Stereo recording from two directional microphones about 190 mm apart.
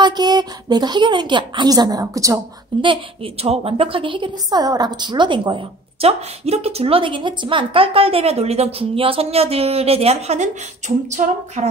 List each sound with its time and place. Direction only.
0.0 s a woman's voice: 20° right (ahead or behind); by 11.6 s 40° right (ahead or behind)